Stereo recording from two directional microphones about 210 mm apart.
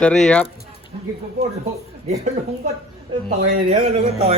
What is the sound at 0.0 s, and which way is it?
Speech, 5° left (ahead or behind).